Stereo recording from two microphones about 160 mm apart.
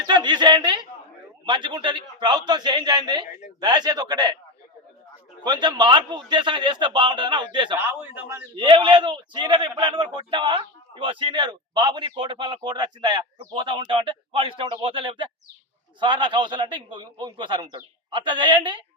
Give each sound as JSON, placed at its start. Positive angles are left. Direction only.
{"t": 0.0, "sound": "a sound", "side_deg": -25}
{"t": 1.5, "sound": "speech", "side_deg": -30}
{"t": 5.4, "sound": "speech", "side_deg": -25}
{"t": 7.8, "sound": "a man's voice", "side_deg": -15}
{"t": 8.5, "sound": "speech", "side_deg": -30}